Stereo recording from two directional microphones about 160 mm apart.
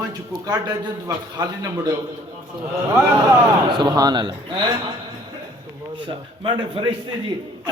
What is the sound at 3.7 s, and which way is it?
Speech, 25° right (ahead or behind).